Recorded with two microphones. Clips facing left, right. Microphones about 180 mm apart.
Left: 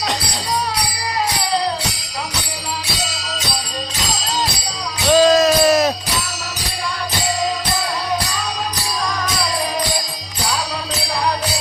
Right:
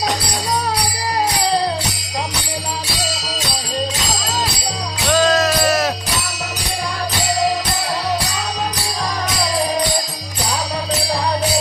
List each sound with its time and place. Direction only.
5.1 s music: 15° left (ahead or behind)